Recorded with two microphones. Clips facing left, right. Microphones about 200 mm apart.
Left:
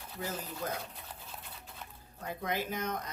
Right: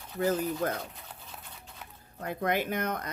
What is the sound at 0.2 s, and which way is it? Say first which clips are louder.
Speech: right 11 dB; 60° right (ahead or behind).